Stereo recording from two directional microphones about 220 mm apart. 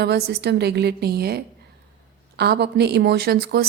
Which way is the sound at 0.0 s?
50° right (ahead or behind).